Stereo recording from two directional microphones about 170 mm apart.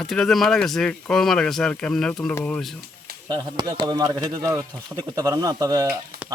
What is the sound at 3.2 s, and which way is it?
A man's voice, 25° right (ahead or behind).